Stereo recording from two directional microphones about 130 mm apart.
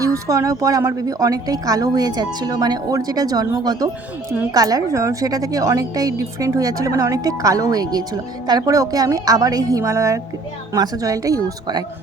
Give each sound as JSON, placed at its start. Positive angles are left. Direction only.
{"t": 0.0, "sound": "a woman's voice", "side_deg": -25}